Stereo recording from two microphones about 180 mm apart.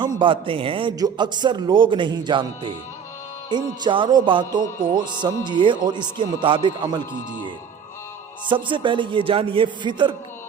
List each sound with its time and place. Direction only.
0.2 s a man's voice: 30° right (ahead or behind)
4.6 s music: 50° right (ahead or behind)
5.5 s a man's voice: 25° right (ahead or behind)
8.4 s a man's voice: 25° right (ahead or behind)